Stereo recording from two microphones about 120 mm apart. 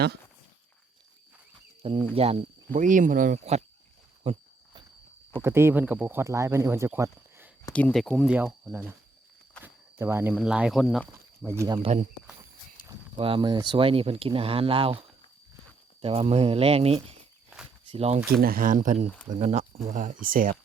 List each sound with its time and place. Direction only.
1.8 s speech: 50° right (ahead or behind)
2.7 s speech: 90° right
4.2 s a sound: 55° right (ahead or behind)
5.4 s speech: 20° right (ahead or behind)
7.7 s speech: 10° left (ahead or behind)
8.1 s speech: 5° right (ahead or behind)
9.6 s cricket: 20° right (ahead or behind)
10.3 s speech: 5° right (ahead or behind)
11.4 s speech: 20° right (ahead or behind)
11.9 s speech: 75° right (ahead or behind)
13.1 s speech: 50° right (ahead or behind)
18.7 s speech: 90° right
19.3 s speech: 70° right (ahead or behind); by 20.6 s 90° right